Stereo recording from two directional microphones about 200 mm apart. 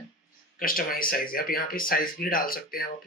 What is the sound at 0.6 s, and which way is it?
Speech, 45° left (ahead or behind).